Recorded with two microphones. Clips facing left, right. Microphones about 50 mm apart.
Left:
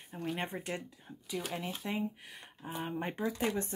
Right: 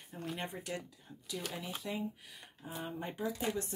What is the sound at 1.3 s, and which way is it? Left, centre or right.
Speech, centre.